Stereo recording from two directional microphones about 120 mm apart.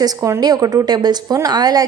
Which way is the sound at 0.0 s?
30° right (ahead or behind).